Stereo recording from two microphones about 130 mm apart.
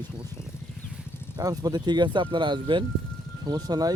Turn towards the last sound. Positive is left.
turn(degrees=-30)  # may be behind; listen again after turning